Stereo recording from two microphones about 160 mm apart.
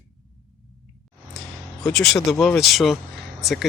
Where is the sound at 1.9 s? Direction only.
Centre (ahead or behind).